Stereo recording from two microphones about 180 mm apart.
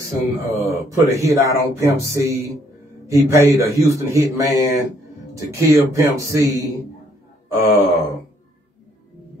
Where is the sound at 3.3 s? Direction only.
15° right (ahead or behind).